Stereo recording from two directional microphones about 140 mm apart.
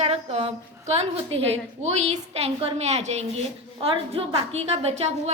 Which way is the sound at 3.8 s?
40° right (ahead or behind).